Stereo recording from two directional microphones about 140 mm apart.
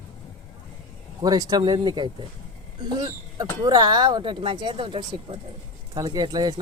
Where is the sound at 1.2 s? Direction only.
25° right (ahead or behind).